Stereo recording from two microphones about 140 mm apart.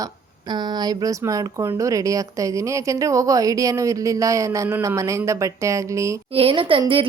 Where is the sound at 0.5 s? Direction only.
30° right (ahead or behind).